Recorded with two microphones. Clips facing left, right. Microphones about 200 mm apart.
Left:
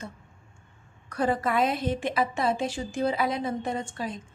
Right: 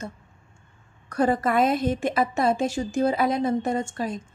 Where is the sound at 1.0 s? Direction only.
45° right (ahead or behind).